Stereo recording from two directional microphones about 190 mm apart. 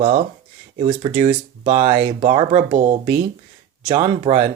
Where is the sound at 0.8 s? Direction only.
35° right (ahead or behind).